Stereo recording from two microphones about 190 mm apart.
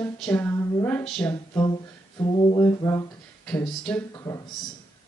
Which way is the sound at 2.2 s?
25° left (ahead or behind).